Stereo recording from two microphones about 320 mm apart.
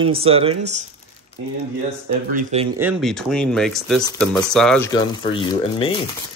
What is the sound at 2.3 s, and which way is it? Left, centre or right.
Speech, centre.